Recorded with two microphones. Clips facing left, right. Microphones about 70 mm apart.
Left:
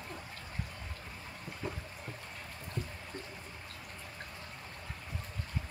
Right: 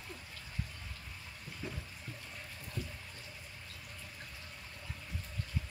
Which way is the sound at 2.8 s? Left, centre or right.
Left.